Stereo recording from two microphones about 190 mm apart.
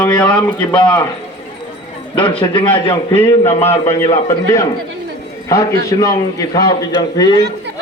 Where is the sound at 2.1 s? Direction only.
25° left (ahead or behind).